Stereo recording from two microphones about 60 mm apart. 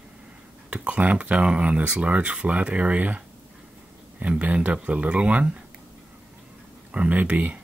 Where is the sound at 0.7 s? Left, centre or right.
Right.